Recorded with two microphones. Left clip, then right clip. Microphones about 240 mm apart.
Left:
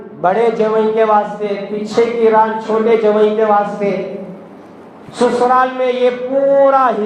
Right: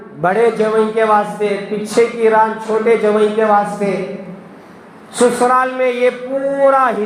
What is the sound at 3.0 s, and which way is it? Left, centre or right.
Speech, right.